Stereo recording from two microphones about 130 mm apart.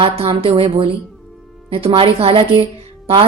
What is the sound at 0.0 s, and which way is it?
A woman's voice, 45° right (ahead or behind).